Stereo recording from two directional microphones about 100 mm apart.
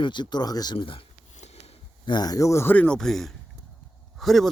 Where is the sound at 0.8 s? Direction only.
60° left (ahead or behind).